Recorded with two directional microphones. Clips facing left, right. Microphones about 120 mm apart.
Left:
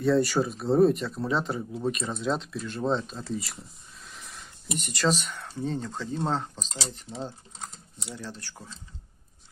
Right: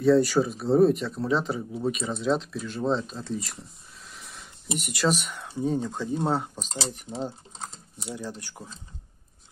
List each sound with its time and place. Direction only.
0.0 s speech: centre (ahead or behind)
7.5 s typing: 35° right (ahead or behind)
8.1 s speech: 15° right (ahead or behind)